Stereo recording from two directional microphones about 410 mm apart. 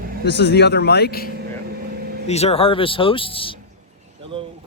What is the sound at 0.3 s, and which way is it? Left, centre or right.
Speech, left.